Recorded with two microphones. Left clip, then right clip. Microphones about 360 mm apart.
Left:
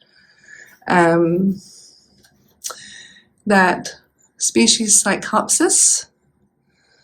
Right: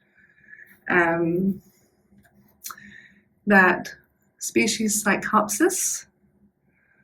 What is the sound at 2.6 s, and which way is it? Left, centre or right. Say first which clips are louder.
Speech: left 8 dB; centre.